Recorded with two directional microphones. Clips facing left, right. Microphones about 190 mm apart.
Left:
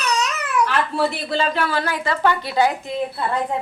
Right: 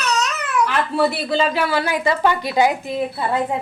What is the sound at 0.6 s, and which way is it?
Speech, 5° right (ahead or behind).